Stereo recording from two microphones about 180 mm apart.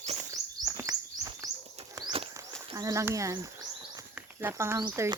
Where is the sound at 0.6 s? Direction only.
20° right (ahead or behind).